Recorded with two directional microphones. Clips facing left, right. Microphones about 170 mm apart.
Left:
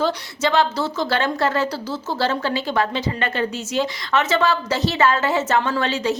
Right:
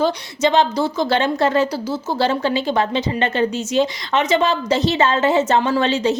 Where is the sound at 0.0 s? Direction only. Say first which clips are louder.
Right 3 dB; 20° right (ahead or behind).